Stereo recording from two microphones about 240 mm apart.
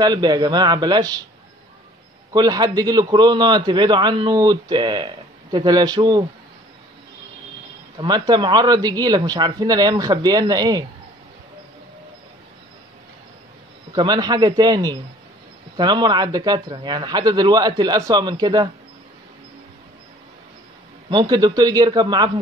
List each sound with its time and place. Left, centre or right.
0.0 s a man's voice: centre
2.3 s a man's voice: centre
8.0 s a man's voice: centre
13.9 s a man's voice: centre
21.1 s a man's voice: centre